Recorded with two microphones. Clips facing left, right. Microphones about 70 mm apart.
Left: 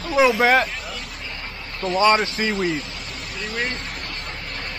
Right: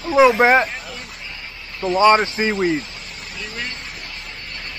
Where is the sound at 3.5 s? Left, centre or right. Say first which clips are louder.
Left 6 dB; left.